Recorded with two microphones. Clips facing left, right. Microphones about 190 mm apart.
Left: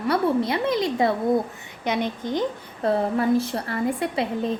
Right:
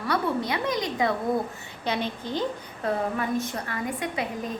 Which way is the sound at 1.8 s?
15° left (ahead or behind).